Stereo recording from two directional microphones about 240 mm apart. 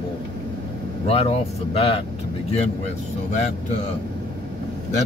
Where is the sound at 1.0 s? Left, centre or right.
Left.